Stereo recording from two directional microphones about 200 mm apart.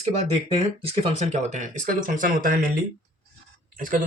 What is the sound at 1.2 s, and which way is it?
Speech, 35° right (ahead or behind).